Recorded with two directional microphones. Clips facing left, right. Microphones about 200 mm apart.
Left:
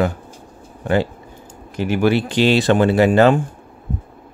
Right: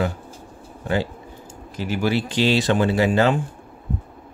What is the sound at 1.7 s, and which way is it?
Speech, 60° left (ahead or behind).